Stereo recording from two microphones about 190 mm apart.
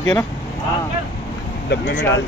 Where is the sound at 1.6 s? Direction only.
60° left (ahead or behind).